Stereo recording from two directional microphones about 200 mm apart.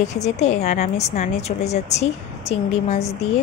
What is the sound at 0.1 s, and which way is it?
Speech, 35° left (ahead or behind).